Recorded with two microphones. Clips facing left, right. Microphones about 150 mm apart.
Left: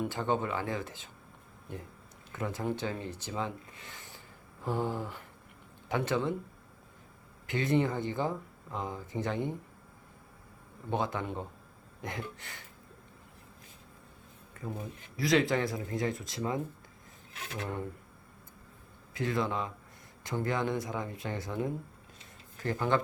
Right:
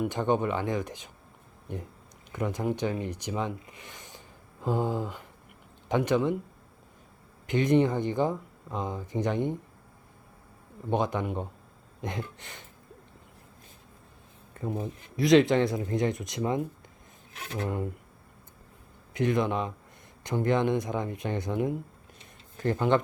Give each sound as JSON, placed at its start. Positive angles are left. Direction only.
{"t": 0.0, "sound": "speech", "side_deg": -20}
{"t": 7.4, "sound": "speech", "side_deg": -20}
{"t": 10.8, "sound": "speech", "side_deg": -20}
{"t": 14.7, "sound": "speech", "side_deg": -20}
{"t": 19.1, "sound": "speech", "side_deg": -20}